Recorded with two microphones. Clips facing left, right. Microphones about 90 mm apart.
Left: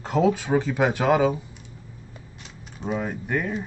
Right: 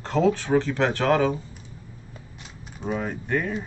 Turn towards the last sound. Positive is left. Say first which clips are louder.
# even
turn(degrees=5)  # may be behind; listen again after turning